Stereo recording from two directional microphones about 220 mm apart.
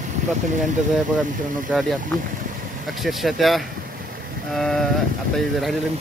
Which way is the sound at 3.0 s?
Centre (ahead or behind).